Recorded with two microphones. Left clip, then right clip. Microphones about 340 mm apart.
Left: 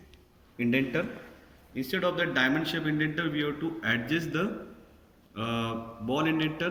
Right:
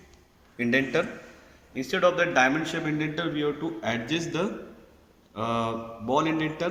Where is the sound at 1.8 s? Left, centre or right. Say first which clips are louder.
Right 6 dB; centre.